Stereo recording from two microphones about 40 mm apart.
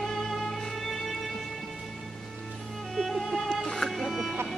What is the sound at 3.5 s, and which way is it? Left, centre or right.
Music, centre.